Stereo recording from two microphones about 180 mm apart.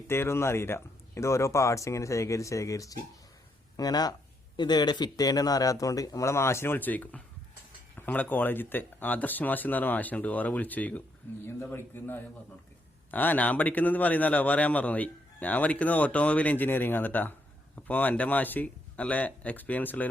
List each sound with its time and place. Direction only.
0.1 s a man's voice: 15° left (ahead or behind)